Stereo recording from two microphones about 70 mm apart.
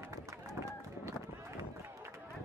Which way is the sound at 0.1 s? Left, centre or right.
Right.